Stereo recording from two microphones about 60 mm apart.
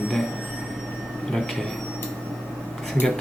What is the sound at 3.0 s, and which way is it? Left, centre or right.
Speech, left.